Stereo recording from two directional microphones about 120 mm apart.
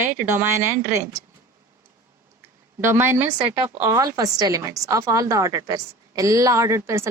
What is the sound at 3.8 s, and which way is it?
Speech, 25° right (ahead or behind).